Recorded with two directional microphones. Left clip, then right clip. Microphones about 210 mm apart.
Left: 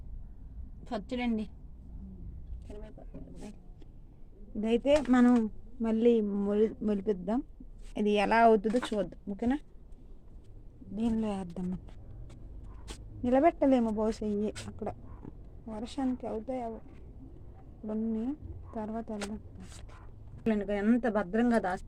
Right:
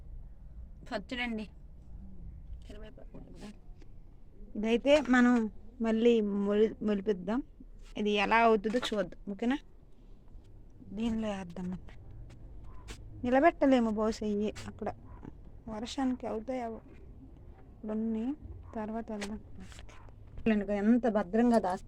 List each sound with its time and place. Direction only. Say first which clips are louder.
0.9 s a woman's voice: left 1 dB; centre (ahead or behind)
2.6 s vehicle: left 3 dB; centre (ahead or behind)
4.6 s a woman's voice: even; 5° left (ahead or behind)
7.9 s speech: left 1 dB; 25° left (ahead or behind)
8.7 s a woman's voice: left 1 dB; 10° left (ahead or behind)
11.2 s speech: left 1 dB; 25° left (ahead or behind)
13.2 s a woman's voice: even; 5° left (ahead or behind)
17.8 s a woman's voice: even; 5° left (ahead or behind)
20.4 s a woman's voice: even; 5° right (ahead or behind)